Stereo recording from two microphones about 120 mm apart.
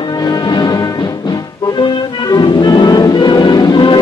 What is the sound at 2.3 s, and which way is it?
Music, 35° left (ahead or behind).